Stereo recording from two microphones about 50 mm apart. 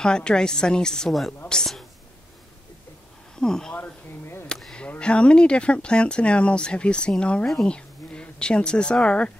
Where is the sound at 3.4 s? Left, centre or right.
Centre.